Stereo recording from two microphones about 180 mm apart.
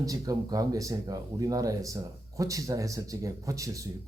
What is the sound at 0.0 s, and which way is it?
A man's voice, 20° right (ahead or behind).